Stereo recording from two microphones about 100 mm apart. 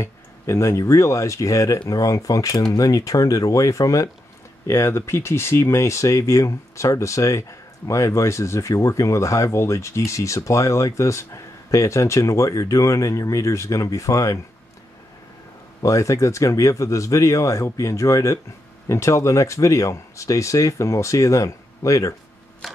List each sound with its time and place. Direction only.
0.0 s speech: 30° left (ahead or behind)
15.8 s speech: 35° left (ahead or behind)